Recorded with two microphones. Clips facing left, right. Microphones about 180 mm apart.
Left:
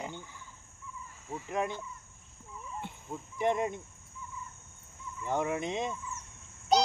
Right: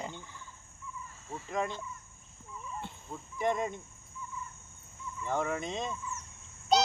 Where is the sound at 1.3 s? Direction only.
15° left (ahead or behind).